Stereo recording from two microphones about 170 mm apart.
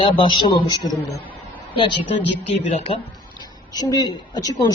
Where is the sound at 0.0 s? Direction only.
30° left (ahead or behind).